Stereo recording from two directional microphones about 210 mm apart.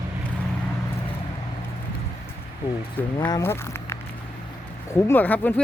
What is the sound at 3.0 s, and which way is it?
Speech, 10° left (ahead or behind).